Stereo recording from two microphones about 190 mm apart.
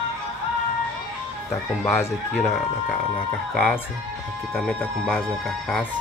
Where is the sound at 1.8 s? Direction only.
10° left (ahead or behind).